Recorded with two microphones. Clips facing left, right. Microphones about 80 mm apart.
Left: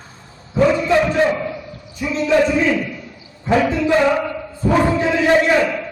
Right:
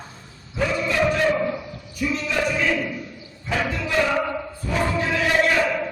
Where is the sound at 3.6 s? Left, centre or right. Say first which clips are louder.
Left 10 dB; left.